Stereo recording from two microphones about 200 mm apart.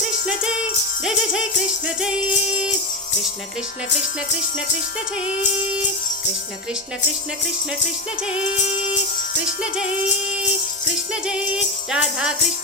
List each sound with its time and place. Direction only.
1.0 s music: 5° right (ahead or behind)
11.1 s music: 5° right (ahead or behind)